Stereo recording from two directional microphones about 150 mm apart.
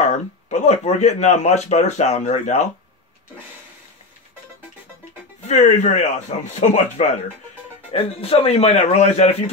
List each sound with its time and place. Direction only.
0.5 s speech: 50° left (ahead or behind)
5.5 s speech: 55° left (ahead or behind)
7.9 s a man's voice: 40° left (ahead or behind)